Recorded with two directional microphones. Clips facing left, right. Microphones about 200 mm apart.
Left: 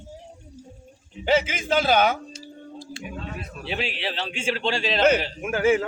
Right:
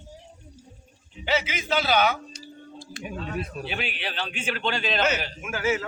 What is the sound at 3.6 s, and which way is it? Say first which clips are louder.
A man's voice: left 3 dB; 25° left (ahead or behind).